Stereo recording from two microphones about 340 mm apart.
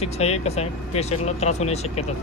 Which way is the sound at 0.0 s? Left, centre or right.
Centre.